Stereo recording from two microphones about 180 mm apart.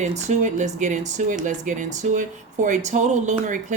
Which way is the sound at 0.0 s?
40° right (ahead or behind).